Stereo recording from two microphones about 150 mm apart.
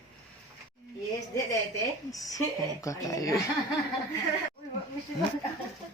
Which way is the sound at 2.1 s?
25° left (ahead or behind).